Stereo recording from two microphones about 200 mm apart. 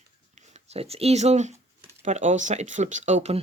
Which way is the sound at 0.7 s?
30° right (ahead or behind).